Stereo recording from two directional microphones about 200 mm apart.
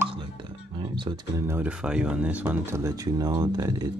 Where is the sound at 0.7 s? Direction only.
25° right (ahead or behind).